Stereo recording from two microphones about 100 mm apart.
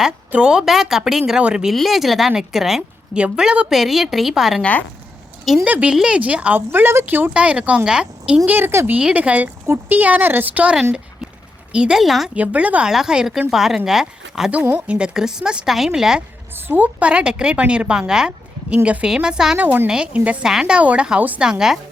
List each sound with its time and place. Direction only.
0.3 s a woman's voice: 10° right (ahead or behind)
5.6 s a woman's voice: 15° right (ahead or behind)
8.4 s speech: 20° right (ahead or behind)
9.0 s a woman's voice: 10° right (ahead or behind)
12.4 s a woman's voice: 15° right (ahead or behind)
16.6 s a woman's voice: 20° right (ahead or behind)
19.5 s a woman's voice: 20° right (ahead or behind)